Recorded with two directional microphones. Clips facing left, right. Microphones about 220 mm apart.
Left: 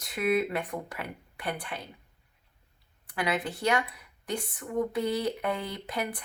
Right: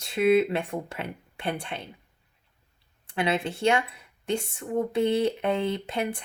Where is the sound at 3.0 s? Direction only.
25° right (ahead or behind).